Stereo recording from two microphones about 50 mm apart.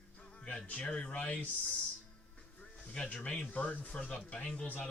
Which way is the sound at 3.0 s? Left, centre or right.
Left.